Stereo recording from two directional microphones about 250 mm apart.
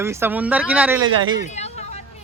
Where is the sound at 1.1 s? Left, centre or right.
Centre.